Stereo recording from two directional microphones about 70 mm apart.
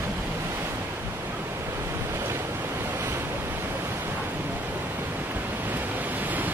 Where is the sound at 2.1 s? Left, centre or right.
Right.